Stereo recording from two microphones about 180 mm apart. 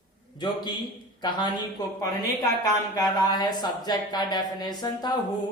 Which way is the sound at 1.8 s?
20° left (ahead or behind).